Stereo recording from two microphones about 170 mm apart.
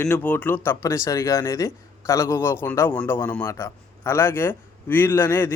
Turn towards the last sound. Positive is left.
turn(degrees=15)  # may be behind; listen again after turning